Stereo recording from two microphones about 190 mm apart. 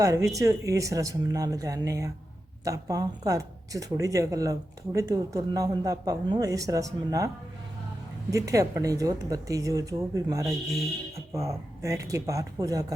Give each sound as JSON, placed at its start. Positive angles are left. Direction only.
{"t": 0.0, "sound": "speech", "side_deg": -15}
{"t": 8.3, "sound": "speech", "side_deg": -15}